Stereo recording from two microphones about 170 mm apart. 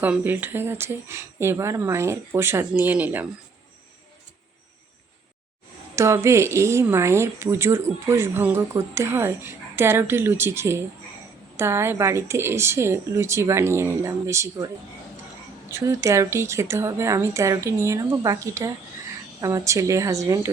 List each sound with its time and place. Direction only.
0.0 s speech: 10° right (ahead or behind)
6.0 s speech: 15° right (ahead or behind)
15.7 s a woman's voice: 15° right (ahead or behind)